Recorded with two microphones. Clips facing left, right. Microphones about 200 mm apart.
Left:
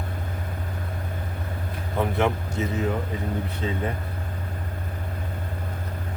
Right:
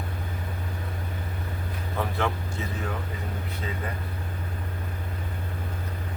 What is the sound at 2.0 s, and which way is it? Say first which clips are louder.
Speech: left 5 dB; 20° left (ahead or behind).